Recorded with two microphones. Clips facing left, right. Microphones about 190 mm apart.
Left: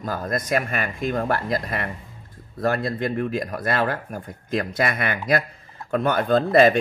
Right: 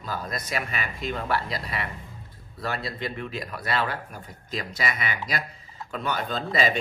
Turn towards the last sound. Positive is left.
turn(degrees=55)  # may be behind; listen again after turning